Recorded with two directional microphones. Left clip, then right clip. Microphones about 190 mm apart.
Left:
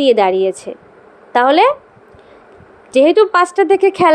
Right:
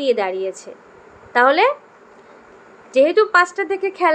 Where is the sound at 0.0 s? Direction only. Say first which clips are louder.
Left 8 dB; 40° left (ahead or behind).